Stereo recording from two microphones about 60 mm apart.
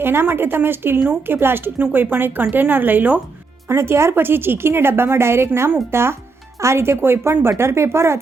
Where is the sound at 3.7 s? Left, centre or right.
Right.